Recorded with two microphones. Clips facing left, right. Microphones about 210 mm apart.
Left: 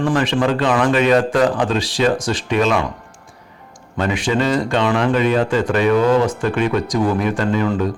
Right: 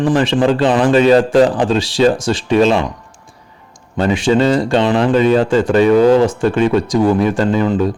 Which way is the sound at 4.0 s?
30° right (ahead or behind).